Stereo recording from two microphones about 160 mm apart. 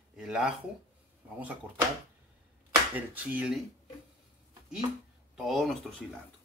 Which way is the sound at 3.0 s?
10° right (ahead or behind).